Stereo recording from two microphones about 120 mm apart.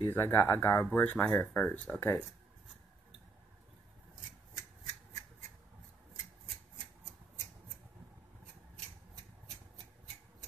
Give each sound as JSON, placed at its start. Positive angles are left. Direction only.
{"t": 0.1, "sound": "speech", "side_deg": 20}